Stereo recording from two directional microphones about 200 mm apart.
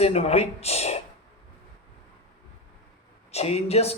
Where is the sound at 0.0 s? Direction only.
30° left (ahead or behind).